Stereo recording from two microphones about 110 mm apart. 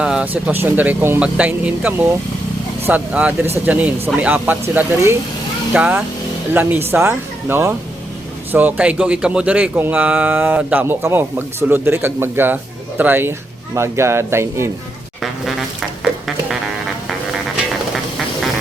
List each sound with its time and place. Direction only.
0.0 s speech: 10° right (ahead or behind); by 14.7 s 25° right (ahead or behind)